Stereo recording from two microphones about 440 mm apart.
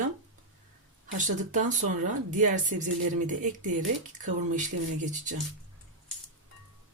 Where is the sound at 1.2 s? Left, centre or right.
Centre.